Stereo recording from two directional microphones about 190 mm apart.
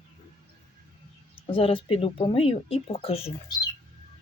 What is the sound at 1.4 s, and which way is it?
Speech, 30° left (ahead or behind).